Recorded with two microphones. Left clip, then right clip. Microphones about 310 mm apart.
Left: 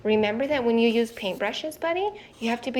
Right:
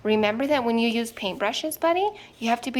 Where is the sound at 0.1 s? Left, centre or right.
Centre.